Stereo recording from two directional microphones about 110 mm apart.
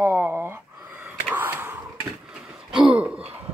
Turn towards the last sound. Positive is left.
turn(degrees=-10)  # may be behind; listen again after turning